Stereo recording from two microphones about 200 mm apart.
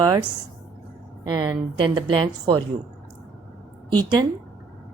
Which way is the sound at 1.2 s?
25° right (ahead or behind).